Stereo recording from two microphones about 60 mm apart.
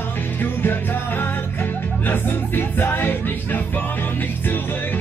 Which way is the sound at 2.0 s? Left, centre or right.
Left.